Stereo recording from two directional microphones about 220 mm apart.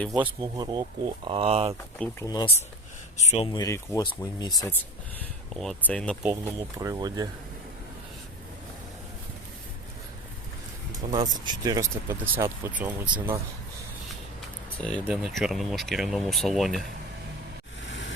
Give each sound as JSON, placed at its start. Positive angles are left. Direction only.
{"t": 0.0, "sound": "speech", "side_deg": 0}
{"t": 0.4, "sound": "speech", "side_deg": -20}
{"t": 2.0, "sound": "speech", "side_deg": 15}
{"t": 3.2, "sound": "speech", "side_deg": 30}
{"t": 5.5, "sound": "speech", "side_deg": 5}
{"t": 6.7, "sound": "speech", "side_deg": -15}
{"t": 11.1, "sound": "speech", "side_deg": -20}
{"t": 14.8, "sound": "speech", "side_deg": 5}
{"t": 17.8, "sound": "vehicle", "side_deg": 55}